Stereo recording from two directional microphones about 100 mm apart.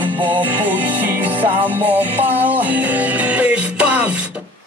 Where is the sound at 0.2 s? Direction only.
15° right (ahead or behind).